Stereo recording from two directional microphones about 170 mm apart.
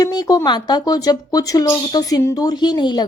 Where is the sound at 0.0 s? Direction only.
20° left (ahead or behind).